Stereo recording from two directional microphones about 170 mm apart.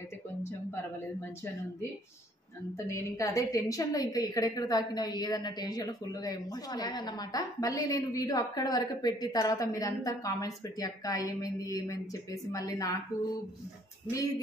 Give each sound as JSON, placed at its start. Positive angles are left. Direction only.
{"t": 2.9, "sound": "a woman's voice", "side_deg": 20}